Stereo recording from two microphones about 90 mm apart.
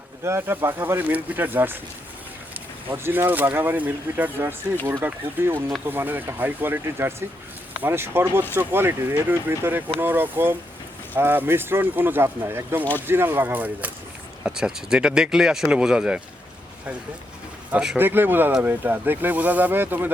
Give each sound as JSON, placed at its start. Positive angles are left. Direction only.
{"t": 0.3, "sound": "speech", "side_deg": -25}
{"t": 2.9, "sound": "speech", "side_deg": -25}
{"t": 14.4, "sound": "speech", "side_deg": -5}
{"t": 17.7, "sound": "speech", "side_deg": -10}
{"t": 17.9, "sound": "speech", "side_deg": -25}